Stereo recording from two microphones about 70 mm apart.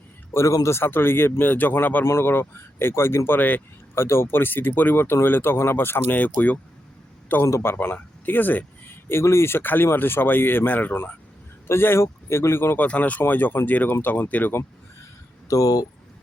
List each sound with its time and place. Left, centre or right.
0.3 s speech: left
3.9 s speech: left
6.1 s speech: left
7.4 s speech: left
12.8 s speech: left
15.4 s speech: left